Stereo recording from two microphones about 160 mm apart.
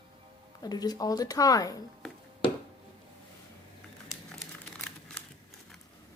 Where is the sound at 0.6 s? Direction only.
25° left (ahead or behind).